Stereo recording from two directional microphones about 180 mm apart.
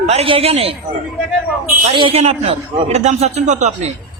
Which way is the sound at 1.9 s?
30° right (ahead or behind).